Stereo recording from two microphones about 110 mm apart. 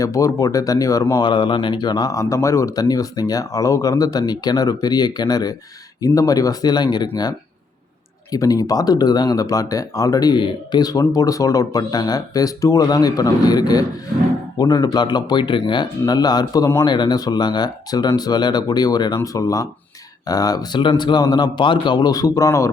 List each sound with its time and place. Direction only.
0.0 s speech: 30° left (ahead or behind)
1.1 s speech: 45° left (ahead or behind)
8.3 s speech: 35° left (ahead or behind)